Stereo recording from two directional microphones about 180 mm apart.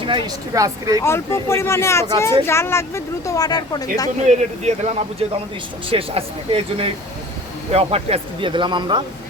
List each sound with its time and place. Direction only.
0.0 s speech: 25° right (ahead or behind)
1.0 s speech: 15° left (ahead or behind)
4.3 s speech: 40° right (ahead or behind)